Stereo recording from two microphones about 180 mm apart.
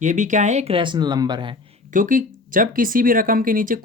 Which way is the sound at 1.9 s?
50° right (ahead or behind).